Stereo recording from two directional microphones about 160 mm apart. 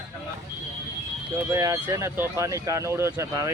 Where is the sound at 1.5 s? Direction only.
20° right (ahead or behind).